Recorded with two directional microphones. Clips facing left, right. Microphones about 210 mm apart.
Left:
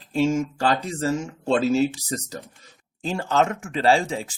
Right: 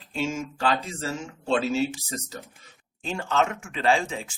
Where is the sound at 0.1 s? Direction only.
35° left (ahead or behind).